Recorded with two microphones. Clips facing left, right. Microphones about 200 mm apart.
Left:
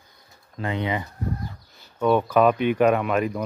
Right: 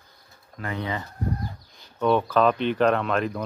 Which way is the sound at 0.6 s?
20° left (ahead or behind).